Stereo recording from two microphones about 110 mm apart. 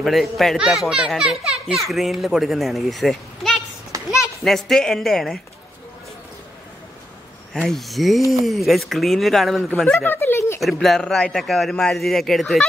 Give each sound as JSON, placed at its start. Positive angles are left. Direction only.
{"t": 0.0, "sound": "a child's voice", "side_deg": 0}
{"t": 7.5, "sound": "a child's voice", "side_deg": 5}
{"t": 9.9, "sound": "a sound", "side_deg": 20}
{"t": 10.6, "sound": "a child's voice", "side_deg": 0}